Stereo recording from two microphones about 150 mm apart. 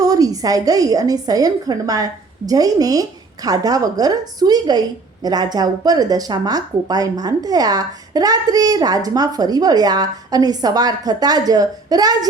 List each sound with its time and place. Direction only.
0.0 s speech: 25° right (ahead or behind)